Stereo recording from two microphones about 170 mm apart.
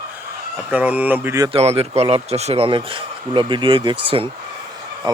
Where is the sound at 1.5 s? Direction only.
35° right (ahead or behind).